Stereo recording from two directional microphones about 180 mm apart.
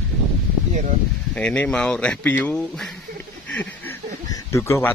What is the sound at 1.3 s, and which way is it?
Speech, 5° left (ahead or behind).